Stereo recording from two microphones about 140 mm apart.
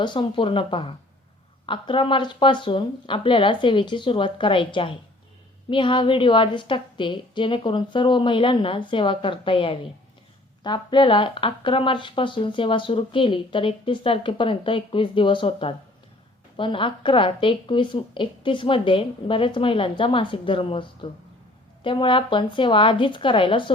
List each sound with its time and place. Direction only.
0.0 s speech: 35° left (ahead or behind)